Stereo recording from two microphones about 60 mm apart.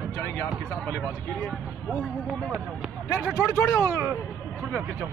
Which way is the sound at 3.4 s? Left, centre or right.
Left.